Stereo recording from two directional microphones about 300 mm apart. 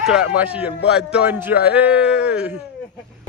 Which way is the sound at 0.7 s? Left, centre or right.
Left.